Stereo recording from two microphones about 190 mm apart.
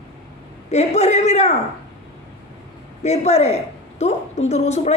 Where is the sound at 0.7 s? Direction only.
35° left (ahead or behind).